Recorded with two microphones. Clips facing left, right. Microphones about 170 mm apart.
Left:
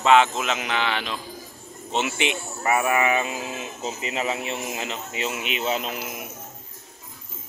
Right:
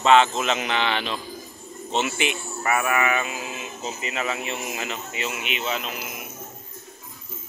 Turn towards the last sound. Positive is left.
turn(degrees=35)  # may be behind; listen again after turning